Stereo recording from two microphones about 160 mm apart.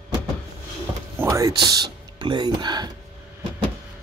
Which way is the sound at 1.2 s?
20° right (ahead or behind).